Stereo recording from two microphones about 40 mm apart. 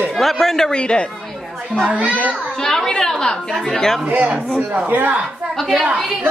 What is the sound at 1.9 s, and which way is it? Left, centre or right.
Speech, right.